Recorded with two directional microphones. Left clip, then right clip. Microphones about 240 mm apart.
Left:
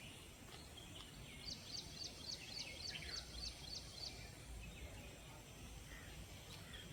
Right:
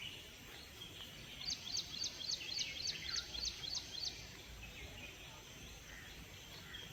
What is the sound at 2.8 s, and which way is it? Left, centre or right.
Music, left.